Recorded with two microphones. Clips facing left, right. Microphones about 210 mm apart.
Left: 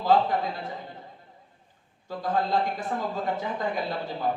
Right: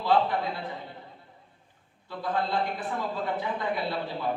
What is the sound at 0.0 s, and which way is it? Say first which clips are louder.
Speech: left 2 dB; 45° left (ahead or behind).